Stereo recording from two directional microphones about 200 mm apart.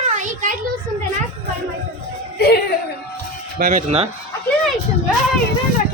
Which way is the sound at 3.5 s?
40° right (ahead or behind).